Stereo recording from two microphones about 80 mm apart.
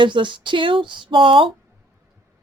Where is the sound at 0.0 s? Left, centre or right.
Right.